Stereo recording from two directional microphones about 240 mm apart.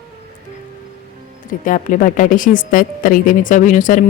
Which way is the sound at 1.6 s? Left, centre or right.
Left.